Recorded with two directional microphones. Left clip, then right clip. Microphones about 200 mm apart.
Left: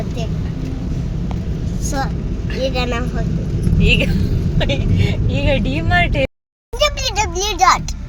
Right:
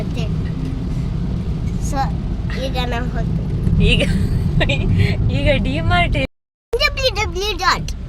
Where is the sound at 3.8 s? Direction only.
35° right (ahead or behind).